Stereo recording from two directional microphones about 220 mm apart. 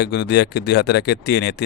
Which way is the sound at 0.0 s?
50° left (ahead or behind).